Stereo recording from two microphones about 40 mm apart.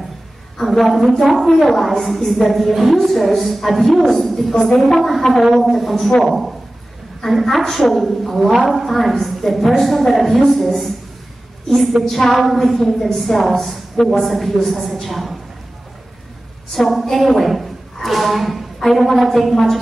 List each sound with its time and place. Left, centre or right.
0.7 s a woman's voice: centre
12.0 s a woman's voice: centre
16.7 s a woman's voice: centre